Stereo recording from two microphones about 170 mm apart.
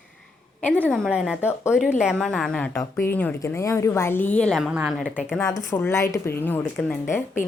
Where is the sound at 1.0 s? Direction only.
5° right (ahead or behind).